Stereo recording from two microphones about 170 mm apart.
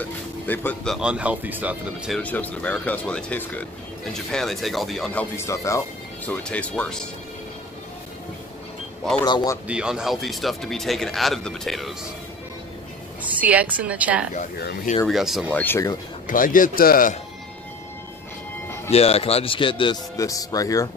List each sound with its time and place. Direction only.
0.0 s speech: 10° left (ahead or behind)
0.9 s speech: 5° right (ahead or behind)
2.1 s speech: 10° left (ahead or behind)
5.4 s speech: 20° left (ahead or behind)
6.2 s speech: 5° left (ahead or behind)
9.2 s speech: 25° left (ahead or behind)
9.7 s speech: 5° right (ahead or behind)
13.2 s a woman's voice: 10° right (ahead or behind)
15.5 s speech: 10° left (ahead or behind)
16.3 s a man's voice: 50° left (ahead or behind)
18.9 s speech: 35° left (ahead or behind); by 20.9 s 20° left (ahead or behind)